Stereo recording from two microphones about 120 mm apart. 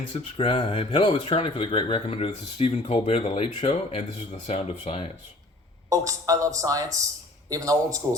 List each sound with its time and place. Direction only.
0.1 s speech: 45° left (ahead or behind)
5.9 s speech: 25° right (ahead or behind)